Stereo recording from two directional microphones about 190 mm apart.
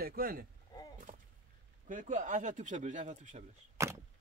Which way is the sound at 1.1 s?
40° right (ahead or behind).